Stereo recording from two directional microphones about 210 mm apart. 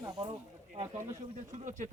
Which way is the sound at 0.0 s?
20° right (ahead or behind).